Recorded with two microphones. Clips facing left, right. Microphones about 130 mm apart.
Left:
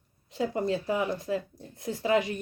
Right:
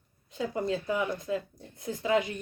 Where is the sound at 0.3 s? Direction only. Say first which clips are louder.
Left 2 dB; 30° left (ahead or behind).